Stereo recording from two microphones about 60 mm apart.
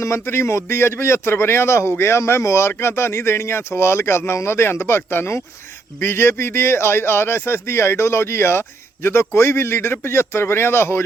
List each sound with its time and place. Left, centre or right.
0.0 s a man's voice: left